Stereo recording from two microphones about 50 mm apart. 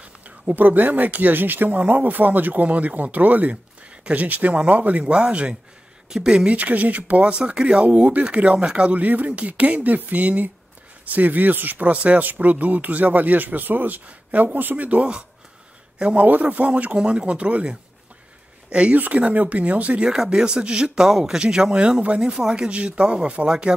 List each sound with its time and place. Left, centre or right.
0.0 s speech: right; by 6.5 s centre
6.5 s speech: right
18.9 s speech: right
20.1 s speech: centre